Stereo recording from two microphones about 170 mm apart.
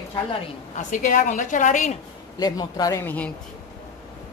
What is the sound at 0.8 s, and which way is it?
A woman's voice, 50° left (ahead or behind).